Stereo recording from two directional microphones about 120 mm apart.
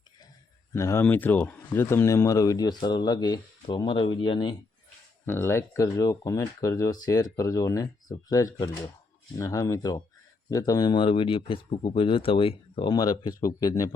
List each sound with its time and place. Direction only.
0.7 s speech: 25° left (ahead or behind); by 4.5 s 45° left (ahead or behind)
5.2 s speech: 20° left (ahead or behind); by 12.9 s 50° left (ahead or behind)
12.9 s speech: 35° left (ahead or behind)